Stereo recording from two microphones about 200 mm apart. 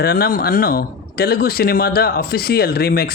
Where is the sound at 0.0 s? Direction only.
50° left (ahead or behind).